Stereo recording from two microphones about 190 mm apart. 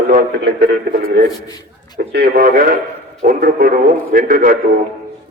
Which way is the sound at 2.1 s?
55° right (ahead or behind).